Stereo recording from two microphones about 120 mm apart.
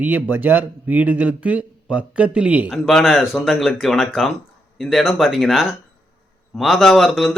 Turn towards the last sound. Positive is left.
turn(degrees=0)  # may be behind; listen again after turning